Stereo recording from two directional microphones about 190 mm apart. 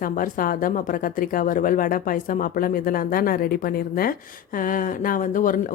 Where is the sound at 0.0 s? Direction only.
45° left (ahead or behind).